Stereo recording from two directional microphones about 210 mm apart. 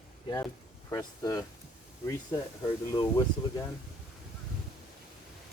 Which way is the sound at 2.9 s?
20° left (ahead or behind).